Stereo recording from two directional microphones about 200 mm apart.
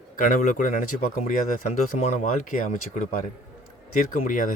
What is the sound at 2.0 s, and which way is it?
Speech, 35° left (ahead or behind).